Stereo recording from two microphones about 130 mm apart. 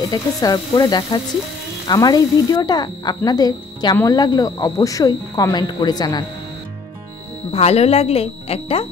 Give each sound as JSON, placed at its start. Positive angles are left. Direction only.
{"t": 0.1, "sound": "speech", "side_deg": 30}
{"t": 3.9, "sound": "speech", "side_deg": 20}
{"t": 7.5, "sound": "speech", "side_deg": 50}